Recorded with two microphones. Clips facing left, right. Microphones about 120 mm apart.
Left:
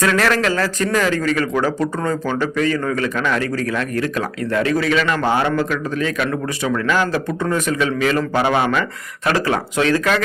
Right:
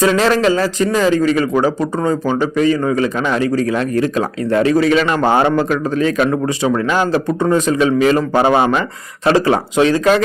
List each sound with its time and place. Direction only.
0.0 s a man's voice: 20° right (ahead or behind)